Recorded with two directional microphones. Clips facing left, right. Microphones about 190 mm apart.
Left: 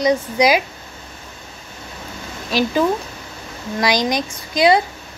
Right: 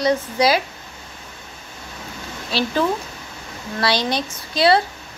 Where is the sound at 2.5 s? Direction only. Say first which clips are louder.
Left 3 dB; 15° left (ahead or behind).